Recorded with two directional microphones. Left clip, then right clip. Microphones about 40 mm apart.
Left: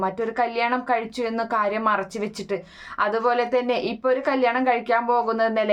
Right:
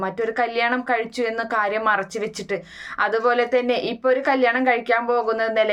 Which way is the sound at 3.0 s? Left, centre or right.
Left.